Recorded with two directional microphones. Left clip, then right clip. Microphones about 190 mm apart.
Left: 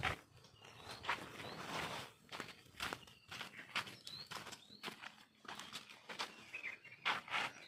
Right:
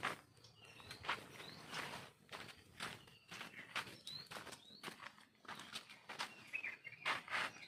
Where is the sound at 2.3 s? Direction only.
30° left (ahead or behind).